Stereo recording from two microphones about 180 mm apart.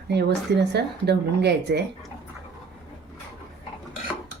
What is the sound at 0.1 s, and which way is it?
Speech, 70° right (ahead or behind).